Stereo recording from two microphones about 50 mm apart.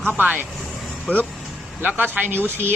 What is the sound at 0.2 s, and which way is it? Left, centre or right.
Speech, right.